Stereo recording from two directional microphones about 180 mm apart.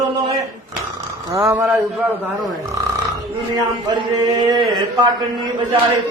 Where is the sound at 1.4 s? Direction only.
10° right (ahead or behind).